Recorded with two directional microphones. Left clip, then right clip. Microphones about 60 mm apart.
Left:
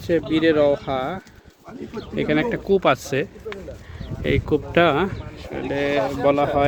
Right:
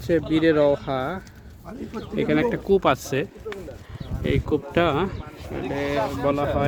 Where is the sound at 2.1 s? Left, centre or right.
Centre.